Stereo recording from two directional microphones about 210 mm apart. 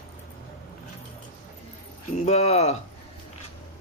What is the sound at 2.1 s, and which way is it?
Speech, 30° left (ahead or behind).